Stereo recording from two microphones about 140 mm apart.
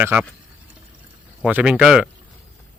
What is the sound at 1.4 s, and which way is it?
Speech, 10° right (ahead or behind).